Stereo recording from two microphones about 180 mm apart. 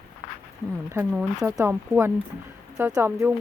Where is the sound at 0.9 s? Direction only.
15° right (ahead or behind).